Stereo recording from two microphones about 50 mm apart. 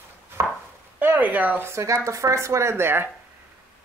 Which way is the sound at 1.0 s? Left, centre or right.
Right.